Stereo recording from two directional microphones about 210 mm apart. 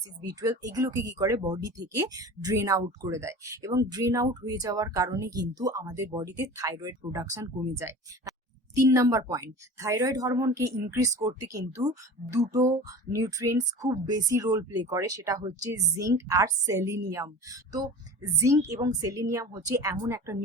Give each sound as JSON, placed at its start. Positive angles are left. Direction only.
{"t": 0.6, "sound": "speech", "side_deg": -15}